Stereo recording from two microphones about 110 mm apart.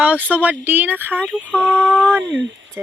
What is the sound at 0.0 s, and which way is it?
Speech, 15° right (ahead or behind).